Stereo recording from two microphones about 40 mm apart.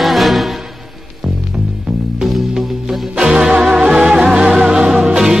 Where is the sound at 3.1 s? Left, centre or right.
Right.